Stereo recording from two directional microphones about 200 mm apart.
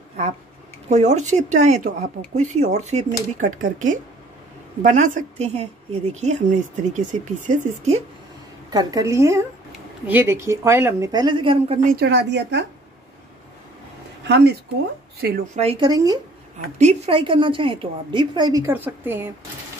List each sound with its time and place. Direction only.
0.8 s a woman's voice: 35° right (ahead or behind)
8.6 s a woman's voice: 20° right (ahead or behind)
11.8 s speech: 50° right (ahead or behind)
14.2 s speech: 55° right (ahead or behind)
15.5 s a woman's voice: 30° right (ahead or behind)
16.7 s a woman's voice: 35° right (ahead or behind); by 19.3 s 10° right (ahead or behind)